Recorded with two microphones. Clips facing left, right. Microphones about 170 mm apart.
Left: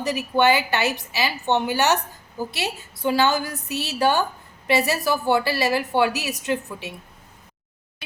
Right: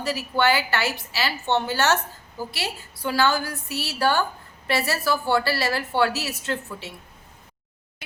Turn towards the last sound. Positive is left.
turn(degrees=15)  # may be behind; listen again after turning